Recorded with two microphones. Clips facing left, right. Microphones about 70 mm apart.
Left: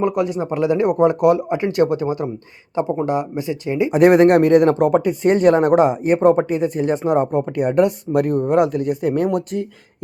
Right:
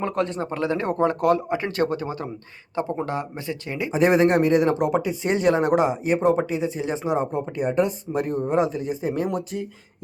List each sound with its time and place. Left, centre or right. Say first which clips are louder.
0.0 s speech: left 6 dB; centre
4.0 s speech: left 6 dB; centre
4.4 s speech: left 6 dB; left